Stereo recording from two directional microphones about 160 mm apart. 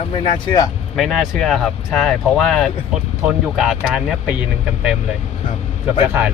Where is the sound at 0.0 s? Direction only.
35° left (ahead or behind).